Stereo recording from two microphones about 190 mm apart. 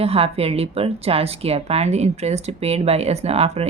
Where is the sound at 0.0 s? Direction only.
30° right (ahead or behind).